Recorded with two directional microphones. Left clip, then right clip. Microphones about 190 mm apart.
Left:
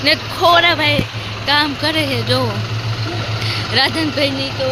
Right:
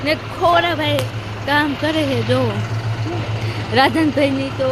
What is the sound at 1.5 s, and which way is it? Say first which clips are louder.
Speech: left 2 dB; 25° right (ahead or behind).